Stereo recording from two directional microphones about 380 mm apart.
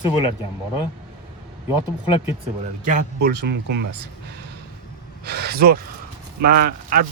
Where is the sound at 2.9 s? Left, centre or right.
Right.